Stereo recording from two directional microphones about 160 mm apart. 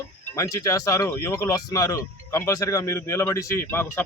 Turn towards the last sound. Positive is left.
turn(degrees=15)  # may be behind; listen again after turning